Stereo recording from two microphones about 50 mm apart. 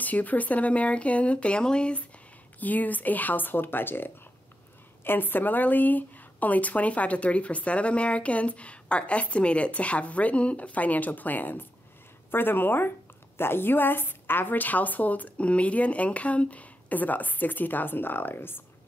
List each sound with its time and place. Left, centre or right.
0.0 s a woman's voice: left
2.6 s a woman's voice: left